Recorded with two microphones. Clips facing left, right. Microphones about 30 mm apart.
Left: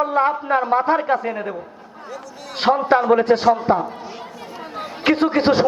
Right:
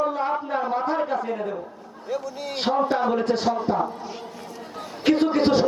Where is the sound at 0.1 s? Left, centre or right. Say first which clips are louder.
Left 7 dB; left.